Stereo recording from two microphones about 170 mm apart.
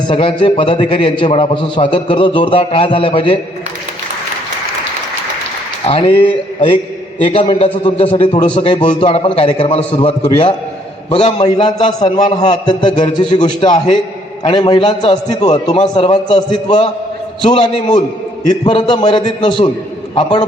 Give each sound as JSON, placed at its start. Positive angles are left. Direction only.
{"t": 0.1, "sound": "a man's voice", "side_deg": 30}
{"t": 5.8, "sound": "a man's voice", "side_deg": 35}